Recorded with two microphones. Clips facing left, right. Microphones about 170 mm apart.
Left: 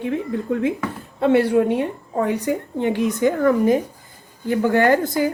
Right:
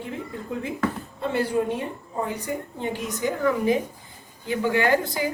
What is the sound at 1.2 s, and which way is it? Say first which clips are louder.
A woman's voice: left 8 dB; 65° left (ahead or behind).